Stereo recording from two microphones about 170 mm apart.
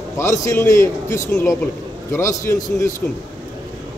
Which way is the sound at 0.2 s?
15° left (ahead or behind).